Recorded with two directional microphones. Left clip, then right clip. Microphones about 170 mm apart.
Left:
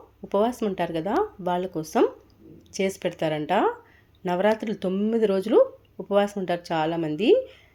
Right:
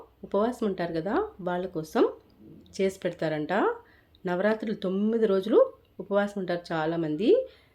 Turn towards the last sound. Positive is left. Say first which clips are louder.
# left 3 dB
turn(degrees=15)  # may be behind; listen again after turning